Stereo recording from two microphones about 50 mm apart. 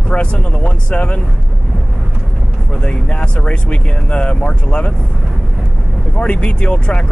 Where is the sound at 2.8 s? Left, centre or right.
Left.